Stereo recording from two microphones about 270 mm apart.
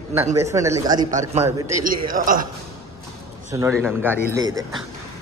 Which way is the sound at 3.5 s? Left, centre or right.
Centre.